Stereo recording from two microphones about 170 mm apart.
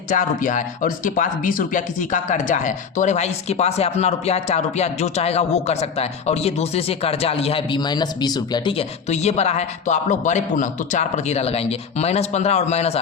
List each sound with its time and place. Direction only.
0.1 s speech: 50° left (ahead or behind)